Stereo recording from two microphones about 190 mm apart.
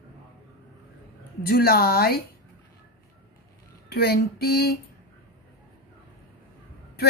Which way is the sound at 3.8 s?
55° left (ahead or behind).